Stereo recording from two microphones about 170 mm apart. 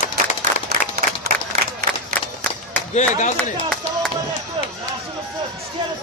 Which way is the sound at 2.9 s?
45° left (ahead or behind).